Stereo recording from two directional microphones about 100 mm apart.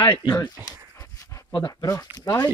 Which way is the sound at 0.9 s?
35° left (ahead or behind).